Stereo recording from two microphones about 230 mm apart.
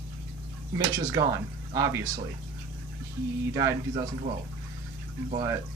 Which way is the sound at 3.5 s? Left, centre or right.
Centre.